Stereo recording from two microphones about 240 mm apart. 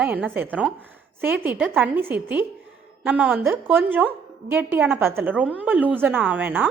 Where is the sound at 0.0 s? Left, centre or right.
Centre.